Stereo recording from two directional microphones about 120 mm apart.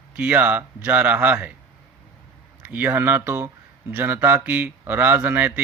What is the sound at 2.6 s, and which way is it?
Speech, 15° right (ahead or behind).